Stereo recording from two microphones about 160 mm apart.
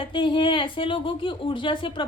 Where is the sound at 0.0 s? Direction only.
30° left (ahead or behind).